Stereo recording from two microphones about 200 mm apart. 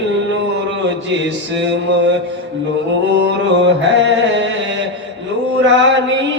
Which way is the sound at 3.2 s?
60° right (ahead or behind).